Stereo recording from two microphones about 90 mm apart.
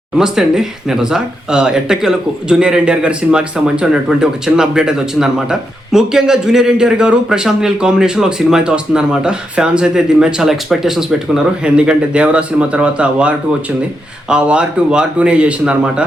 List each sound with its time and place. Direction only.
0.2 s speech: 5° right (ahead or behind)